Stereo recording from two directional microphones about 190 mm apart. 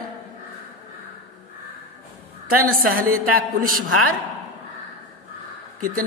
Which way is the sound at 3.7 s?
90° right.